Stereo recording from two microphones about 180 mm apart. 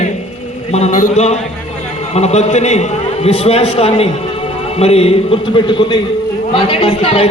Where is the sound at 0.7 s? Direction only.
40° left (ahead or behind).